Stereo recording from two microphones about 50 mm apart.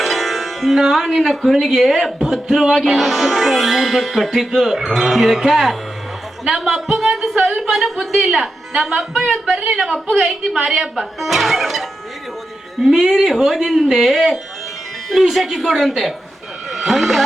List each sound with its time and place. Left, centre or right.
0.0 s a woman's voice: centre
9.3 s speech: right
9.9 s a woman's voice: centre
11.2 s speech: centre